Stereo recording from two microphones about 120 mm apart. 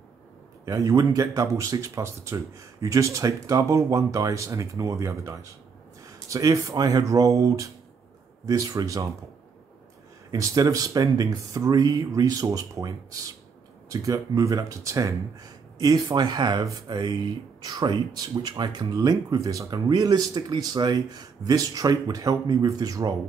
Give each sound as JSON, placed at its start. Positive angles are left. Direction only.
{"t": 0.7, "sound": "speech", "side_deg": -25}
{"t": 10.3, "sound": "speech", "side_deg": -30}